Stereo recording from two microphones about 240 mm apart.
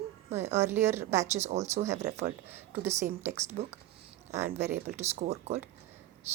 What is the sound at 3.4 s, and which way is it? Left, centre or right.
Speech, right.